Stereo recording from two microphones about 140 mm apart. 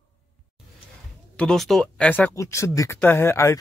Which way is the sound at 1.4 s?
5° left (ahead or behind).